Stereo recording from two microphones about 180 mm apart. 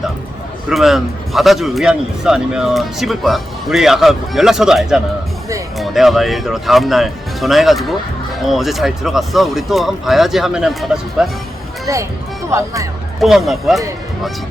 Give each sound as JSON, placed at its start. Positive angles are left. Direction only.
{"t": 0.7, "sound": "speech", "side_deg": 0}
{"t": 11.9, "sound": "speech", "side_deg": -20}
{"t": 13.1, "sound": "speech", "side_deg": 0}